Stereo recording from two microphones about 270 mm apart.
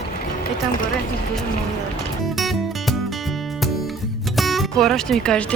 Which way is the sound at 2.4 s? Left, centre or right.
Centre.